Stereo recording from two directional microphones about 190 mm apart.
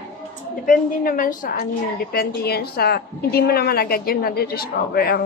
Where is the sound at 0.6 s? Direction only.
45° left (ahead or behind).